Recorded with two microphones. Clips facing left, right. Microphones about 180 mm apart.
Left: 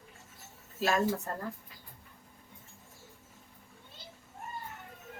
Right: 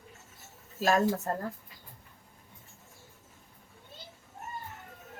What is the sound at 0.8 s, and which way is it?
Speech, 40° right (ahead or behind).